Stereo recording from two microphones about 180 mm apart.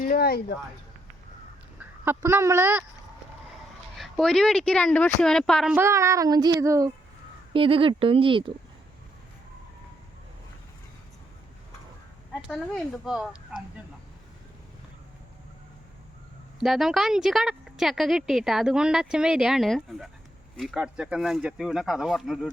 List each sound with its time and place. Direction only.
0.0 s speech: 55° left (ahead or behind)
1.8 s speech: 15° right (ahead or behind)
3.9 s a woman's voice: centre (ahead or behind)
5.7 s speech: 15° right (ahead or behind)
7.5 s speech: 30° right (ahead or behind)
12.3 s a woman's voice: centre (ahead or behind)
16.6 s a woman's voice: centre (ahead or behind)